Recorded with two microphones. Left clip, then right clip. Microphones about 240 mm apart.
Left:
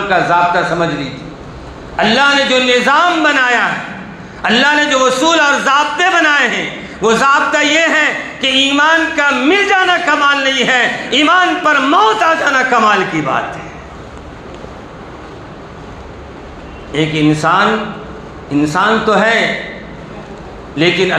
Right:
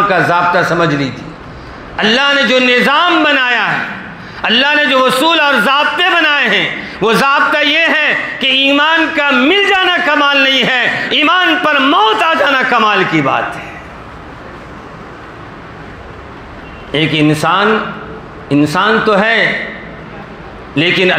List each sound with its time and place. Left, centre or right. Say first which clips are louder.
0.1 s a man's voice: right 1 dB; right
2.0 s a man's voice: even; right
16.9 s a man's voice: right 2 dB; right
20.7 s a man's voice: right 1 dB; right